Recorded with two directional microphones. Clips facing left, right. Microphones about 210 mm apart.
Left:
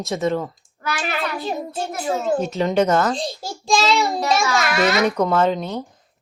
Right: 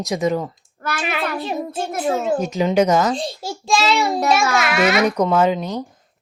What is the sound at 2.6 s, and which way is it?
A child's voice, 5° right (ahead or behind).